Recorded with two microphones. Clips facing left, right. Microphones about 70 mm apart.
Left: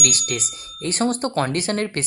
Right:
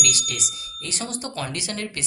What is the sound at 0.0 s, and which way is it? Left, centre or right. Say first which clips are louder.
A woman's voice: left 3 dB; left.